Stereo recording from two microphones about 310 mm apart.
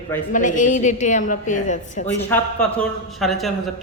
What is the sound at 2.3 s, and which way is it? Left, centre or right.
A woman's voice, centre.